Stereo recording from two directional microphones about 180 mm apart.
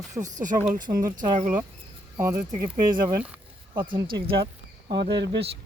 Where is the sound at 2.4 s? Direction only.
40° right (ahead or behind).